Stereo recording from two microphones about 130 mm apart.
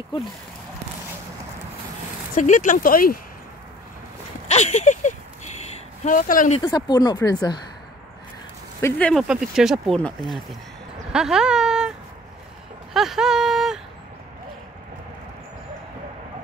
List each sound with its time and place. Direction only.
2.3 s speech: 75° left (ahead or behind); by 3.2 s 90° left
4.5 s speech: 60° left (ahead or behind)
6.0 s speech: 90° left
6.6 s speech: 30° left (ahead or behind)
8.9 s speech: 10° left (ahead or behind)
9.3 s speech: 5° right (ahead or behind)
12.9 s speech: 5° right (ahead or behind)